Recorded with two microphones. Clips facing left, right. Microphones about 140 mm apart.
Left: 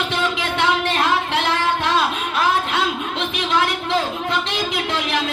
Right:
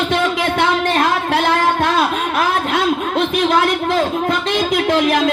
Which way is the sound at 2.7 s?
45° right (ahead or behind).